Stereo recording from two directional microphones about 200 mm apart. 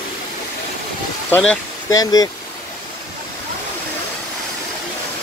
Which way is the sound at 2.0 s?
20° left (ahead or behind).